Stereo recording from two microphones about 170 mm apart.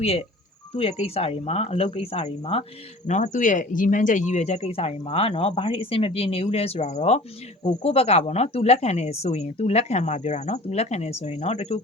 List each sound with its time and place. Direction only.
0.0 s speech: 35° left (ahead or behind)